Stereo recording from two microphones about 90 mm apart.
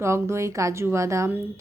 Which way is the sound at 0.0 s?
30° right (ahead or behind).